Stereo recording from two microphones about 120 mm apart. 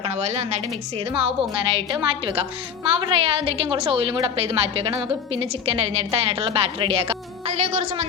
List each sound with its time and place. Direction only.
0.0 s a woman's voice: 60° right (ahead or behind)
1.2 s a woman's voice: 45° right (ahead or behind); by 8.0 s 65° right (ahead or behind)